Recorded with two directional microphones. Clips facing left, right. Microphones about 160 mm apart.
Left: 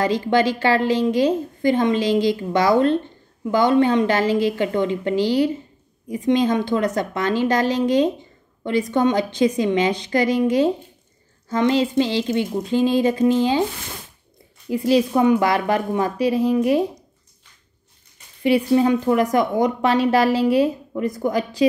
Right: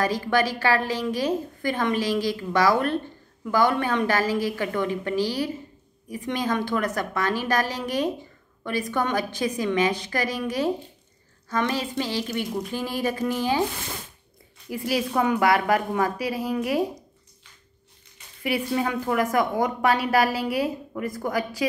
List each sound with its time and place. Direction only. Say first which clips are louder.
0.0 s a woman's voice: left 5 dB; 25° left (ahead or behind)
14.7 s a woman's voice: left 8 dB; 25° left (ahead or behind)
18.4 s a woman's voice: left 9 dB; 25° left (ahead or behind)